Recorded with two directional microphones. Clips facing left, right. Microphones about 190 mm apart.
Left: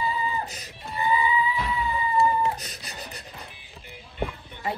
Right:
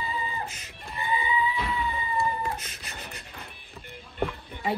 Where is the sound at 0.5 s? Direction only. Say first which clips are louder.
Left 3 dB; 35° left (ahead or behind).